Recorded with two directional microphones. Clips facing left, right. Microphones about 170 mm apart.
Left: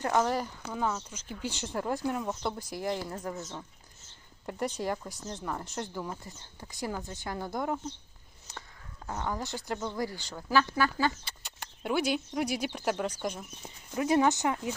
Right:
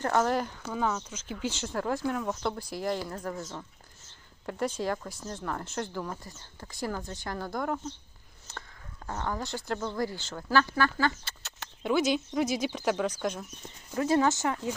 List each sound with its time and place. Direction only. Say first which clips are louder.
0.0 s speech: right 1 dB; 10° left (ahead or behind)
4.4 s speech: right 2 dB; 15° left (ahead or behind)
9.0 s speech: right 1 dB; 15° left (ahead or behind)